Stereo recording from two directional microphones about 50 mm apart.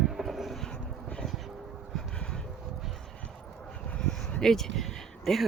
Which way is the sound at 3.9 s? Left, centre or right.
Centre.